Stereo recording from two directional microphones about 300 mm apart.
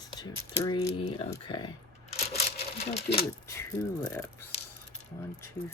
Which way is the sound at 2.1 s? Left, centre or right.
Left.